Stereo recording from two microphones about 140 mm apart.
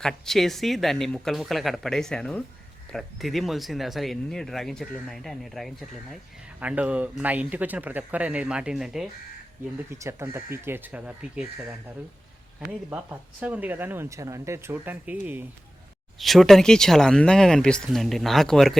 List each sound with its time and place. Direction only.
0.0 s speech: centre (ahead or behind)
9.7 s speech: 20° right (ahead or behind)
12.5 s speech: 15° right (ahead or behind)
16.1 s speech: centre (ahead or behind)